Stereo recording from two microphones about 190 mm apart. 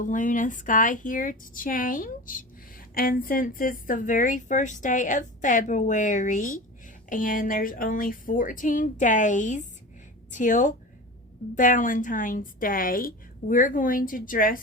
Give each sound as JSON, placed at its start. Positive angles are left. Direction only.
{"t": 0.0, "sound": "a woman's voice", "side_deg": 45}